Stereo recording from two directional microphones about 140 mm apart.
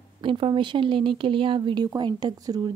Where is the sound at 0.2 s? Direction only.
35° right (ahead or behind).